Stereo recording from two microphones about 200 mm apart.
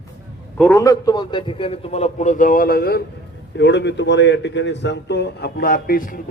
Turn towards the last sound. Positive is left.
turn(degrees=45)  # may be behind; listen again after turning